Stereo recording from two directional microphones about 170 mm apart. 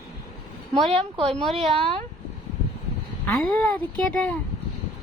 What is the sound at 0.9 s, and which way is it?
Speech, 30° right (ahead or behind).